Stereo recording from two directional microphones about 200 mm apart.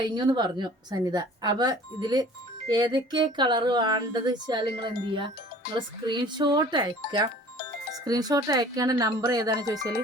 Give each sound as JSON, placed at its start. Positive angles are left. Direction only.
{"t": 0.0, "sound": "speech", "side_deg": -20}
{"t": 5.6, "sound": "speech", "side_deg": 55}
{"t": 6.1, "sound": "speech", "side_deg": -25}